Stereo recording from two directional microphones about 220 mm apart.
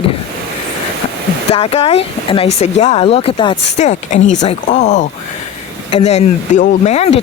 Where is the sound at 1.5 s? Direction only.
25° left (ahead or behind).